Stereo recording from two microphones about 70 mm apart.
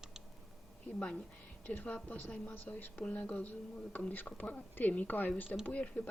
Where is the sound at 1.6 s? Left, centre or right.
Left.